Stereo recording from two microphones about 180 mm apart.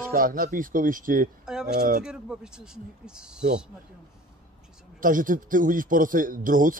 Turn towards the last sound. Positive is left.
turn(degrees=-50)  # may be behind; listen again after turning